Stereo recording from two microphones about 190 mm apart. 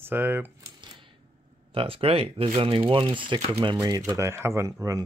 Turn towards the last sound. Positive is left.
turn(degrees=-15)  # may be behind; listen again after turning